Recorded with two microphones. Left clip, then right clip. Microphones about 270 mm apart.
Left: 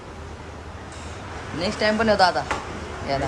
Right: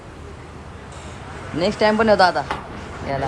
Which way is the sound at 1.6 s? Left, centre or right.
Centre.